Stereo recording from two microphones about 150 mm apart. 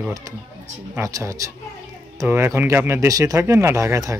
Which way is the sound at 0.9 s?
20° right (ahead or behind).